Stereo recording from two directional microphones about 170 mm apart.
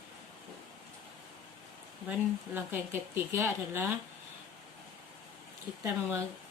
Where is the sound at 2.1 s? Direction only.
10° right (ahead or behind).